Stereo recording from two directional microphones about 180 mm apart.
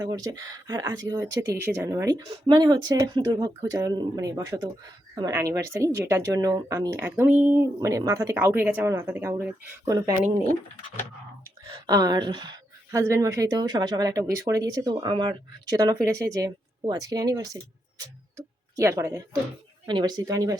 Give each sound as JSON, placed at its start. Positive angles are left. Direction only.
{"t": 0.0, "sound": "speech", "side_deg": -20}
{"t": 11.7, "sound": "speech", "side_deg": -20}